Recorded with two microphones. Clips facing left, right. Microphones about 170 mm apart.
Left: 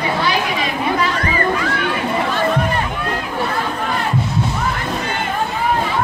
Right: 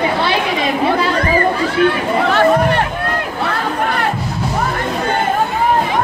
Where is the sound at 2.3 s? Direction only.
70° right (ahead or behind).